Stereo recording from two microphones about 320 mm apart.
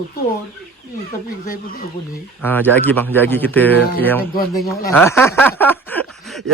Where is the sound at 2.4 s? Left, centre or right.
Centre.